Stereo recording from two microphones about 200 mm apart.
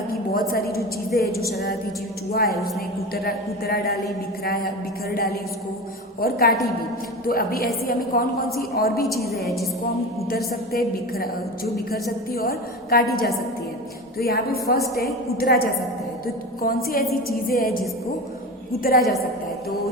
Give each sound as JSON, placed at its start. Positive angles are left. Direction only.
{"t": 0.1, "sound": "a sound", "side_deg": 45}
{"t": 1.1, "sound": "a woman's voice", "side_deg": 50}
{"t": 2.3, "sound": "a woman's voice", "side_deg": 45}
{"t": 9.2, "sound": "a woman's voice", "side_deg": 0}
{"t": 10.7, "sound": "a woman's voice", "side_deg": 50}
{"t": 12.3, "sound": "a woman's voice", "side_deg": 50}
{"t": 14.2, "sound": "a woman's voice", "side_deg": 50}
{"t": 18.8, "sound": "a woman's voice", "side_deg": 50}